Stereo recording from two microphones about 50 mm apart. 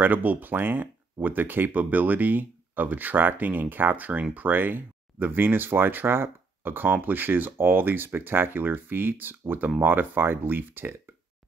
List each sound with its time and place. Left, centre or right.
0.0 s speech: right